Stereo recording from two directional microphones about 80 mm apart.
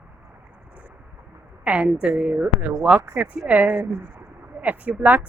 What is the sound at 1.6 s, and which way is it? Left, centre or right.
A woman's voice, centre.